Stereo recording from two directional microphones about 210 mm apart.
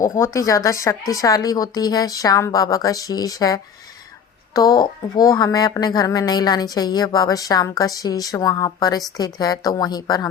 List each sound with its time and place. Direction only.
0.0 s a woman's voice: 15° left (ahead or behind)